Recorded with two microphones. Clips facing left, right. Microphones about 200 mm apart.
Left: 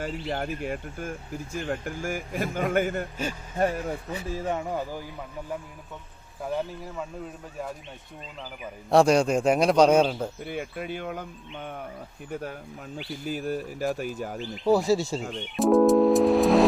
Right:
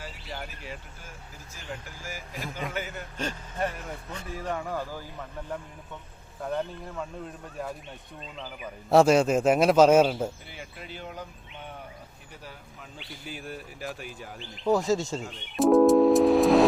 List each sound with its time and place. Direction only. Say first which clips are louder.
0.0 s speech: left 9 dB; 55° left (ahead or behind)
4.4 s speech: left 2 dB; 25° left (ahead or behind)
6.4 s a man's voice: left 1 dB; 5° left (ahead or behind)
8.9 s a man's voice: even; 5° right (ahead or behind)
10.4 s speech: left 11 dB; 55° left (ahead or behind)
12.3 s speech: left 13 dB; 55° left (ahead or behind)
13.2 s speech: left 9 dB; 40° left (ahead or behind)
14.5 s speech: left 2 dB; 10° left (ahead or behind)
15.5 s a man's voice: right 1 dB; centre (ahead or behind)